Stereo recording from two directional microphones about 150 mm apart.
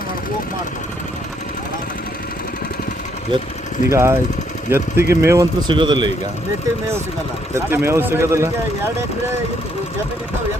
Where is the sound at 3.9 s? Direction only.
20° right (ahead or behind).